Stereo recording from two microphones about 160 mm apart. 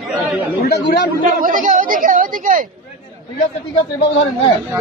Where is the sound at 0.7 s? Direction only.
90° left.